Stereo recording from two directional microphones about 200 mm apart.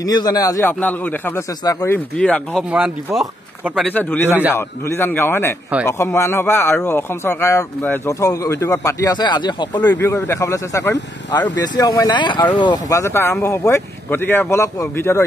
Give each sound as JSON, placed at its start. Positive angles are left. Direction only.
{"t": 0.0, "sound": "speech", "side_deg": 20}
{"t": 2.1, "sound": "speech", "side_deg": 5}
{"t": 2.7, "sound": "speech", "side_deg": -5}